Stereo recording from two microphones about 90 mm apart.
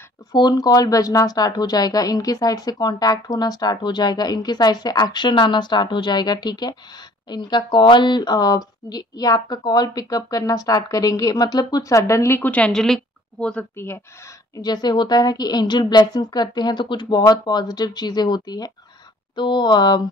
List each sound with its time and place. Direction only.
0.3 s a woman's voice: 50° left (ahead or behind); by 12.4 s 35° left (ahead or behind)
12.4 s a woman's voice: 15° left (ahead or behind)
13.7 s speech: 30° left (ahead or behind)
14.5 s a woman's voice: 50° left (ahead or behind)
19.3 s speech: 60° left (ahead or behind)